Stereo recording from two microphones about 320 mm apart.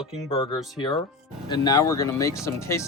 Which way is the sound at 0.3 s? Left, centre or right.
Centre.